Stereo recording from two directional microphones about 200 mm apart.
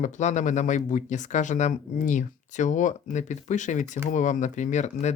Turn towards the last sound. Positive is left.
turn(degrees=35)  # may be behind; listen again after turning